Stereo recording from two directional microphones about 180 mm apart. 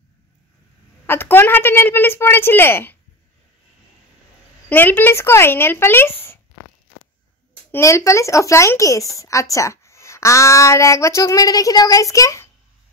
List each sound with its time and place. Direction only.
1.0 s speech: 10° left (ahead or behind)
4.6 s speech: 10° left (ahead or behind)
7.7 s speech: 15° left (ahead or behind)